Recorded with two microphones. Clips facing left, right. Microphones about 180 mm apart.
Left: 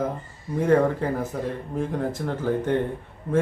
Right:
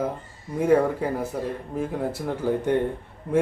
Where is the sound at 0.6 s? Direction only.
10° right (ahead or behind).